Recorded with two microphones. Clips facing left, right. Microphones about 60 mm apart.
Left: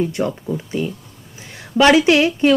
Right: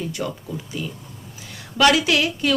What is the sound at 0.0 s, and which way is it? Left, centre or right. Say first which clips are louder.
A woman's voice: left 7 dB; left.